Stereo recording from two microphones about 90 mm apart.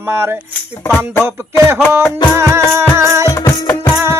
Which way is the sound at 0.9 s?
20° left (ahead or behind).